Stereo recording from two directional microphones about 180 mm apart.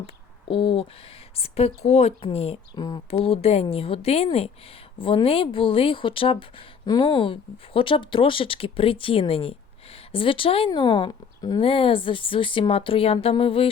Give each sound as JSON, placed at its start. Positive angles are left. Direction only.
{"t": 0.0, "sound": "speech", "side_deg": 30}